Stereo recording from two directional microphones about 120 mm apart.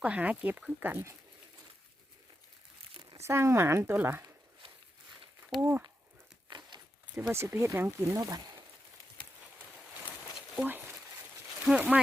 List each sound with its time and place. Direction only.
0.0 s speech: 10° right (ahead or behind)
2.9 s crumpling: 40° right (ahead or behind)
3.2 s speech: 20° right (ahead or behind)
5.5 s speech: 15° right (ahead or behind)
6.5 s a sound: 35° right (ahead or behind)
7.2 s speech: 20° right (ahead or behind)
10.6 s speech: 15° right (ahead or behind)